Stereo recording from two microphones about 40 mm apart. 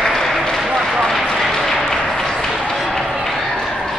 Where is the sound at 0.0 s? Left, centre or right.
Centre.